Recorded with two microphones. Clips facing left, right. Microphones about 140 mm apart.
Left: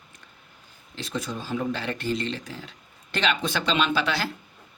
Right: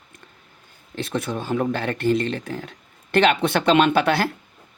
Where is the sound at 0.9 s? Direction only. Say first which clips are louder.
Right 6 dB; 60° right (ahead or behind).